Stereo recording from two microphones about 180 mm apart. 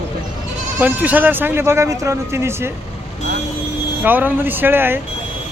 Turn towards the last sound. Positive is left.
turn(degrees=-10)  # may be behind; listen again after turning